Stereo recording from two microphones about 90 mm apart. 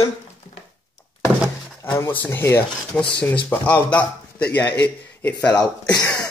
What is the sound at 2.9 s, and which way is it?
A man's voice, 15° left (ahead or behind).